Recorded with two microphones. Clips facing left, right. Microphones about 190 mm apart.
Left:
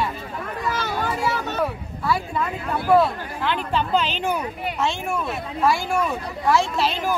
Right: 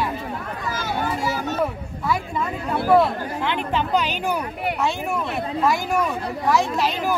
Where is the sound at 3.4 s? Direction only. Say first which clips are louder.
Left 1 dB; 15° right (ahead or behind).